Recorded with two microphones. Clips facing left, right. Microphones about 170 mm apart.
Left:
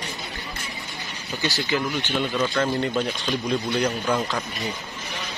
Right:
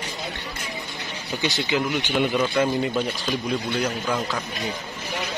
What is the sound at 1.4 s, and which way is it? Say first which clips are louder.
A man's voice: right 1 dB; 20° right (ahead or behind).